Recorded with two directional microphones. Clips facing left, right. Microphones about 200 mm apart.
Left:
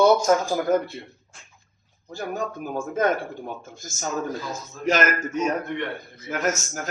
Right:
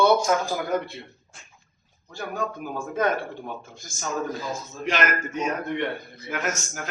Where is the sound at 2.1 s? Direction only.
45° left (ahead or behind).